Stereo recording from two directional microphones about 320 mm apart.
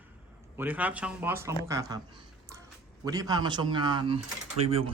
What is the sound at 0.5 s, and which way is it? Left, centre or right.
Speech, centre.